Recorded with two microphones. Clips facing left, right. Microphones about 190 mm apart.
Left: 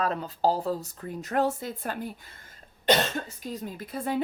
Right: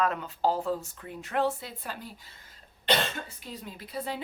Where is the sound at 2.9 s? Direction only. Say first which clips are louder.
Left 4 dB; 45° left (ahead or behind).